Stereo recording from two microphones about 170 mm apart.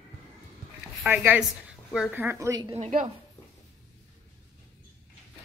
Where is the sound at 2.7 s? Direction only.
40° right (ahead or behind).